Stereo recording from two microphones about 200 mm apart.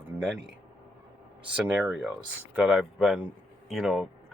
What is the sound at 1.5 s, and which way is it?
Speech, 5° right (ahead or behind).